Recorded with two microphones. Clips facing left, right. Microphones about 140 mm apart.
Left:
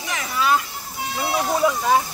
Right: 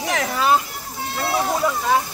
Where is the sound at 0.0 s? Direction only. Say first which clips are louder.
Right 6 dB; 65° right (ahead or behind).